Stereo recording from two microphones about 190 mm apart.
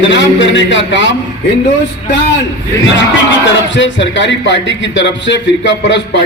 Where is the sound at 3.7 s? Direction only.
75° left (ahead or behind).